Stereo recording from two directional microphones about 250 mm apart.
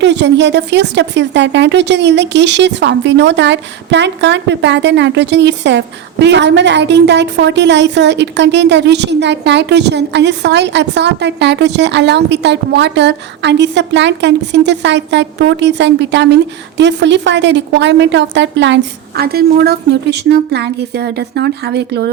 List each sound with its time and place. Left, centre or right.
0.0 s speech: right